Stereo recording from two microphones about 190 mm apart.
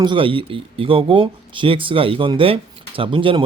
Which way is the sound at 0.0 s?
25° right (ahead or behind).